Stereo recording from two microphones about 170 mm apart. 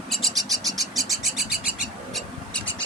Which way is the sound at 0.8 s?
Centre (ahead or behind).